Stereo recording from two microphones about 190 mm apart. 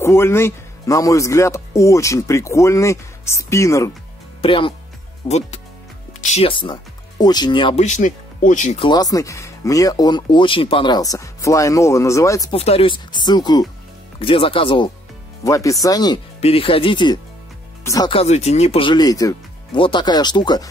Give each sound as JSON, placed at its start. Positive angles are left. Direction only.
{"t": 0.0, "sound": "a man's voice", "side_deg": 15}
{"t": 4.4, "sound": "speech", "side_deg": 25}
{"t": 7.8, "sound": "speech", "side_deg": 40}
{"t": 8.7, "sound": "a man's voice", "side_deg": 25}
{"t": 12.5, "sound": "speech", "side_deg": 30}
{"t": 15.4, "sound": "a man's voice", "side_deg": 15}
{"t": 16.3, "sound": "speech", "side_deg": 30}
{"t": 18.1, "sound": "speech", "side_deg": 35}